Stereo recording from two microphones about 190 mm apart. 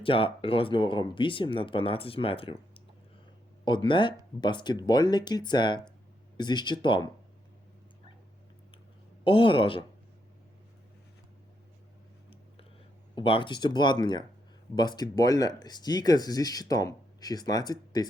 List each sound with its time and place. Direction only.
0.0 s speech: 30° left (ahead or behind)
3.8 s speech: 25° left (ahead or behind)
9.2 s speech: 25° left (ahead or behind)
13.1 s speech: 25° left (ahead or behind)